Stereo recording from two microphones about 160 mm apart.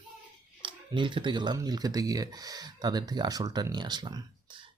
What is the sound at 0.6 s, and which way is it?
Speech, 30° right (ahead or behind).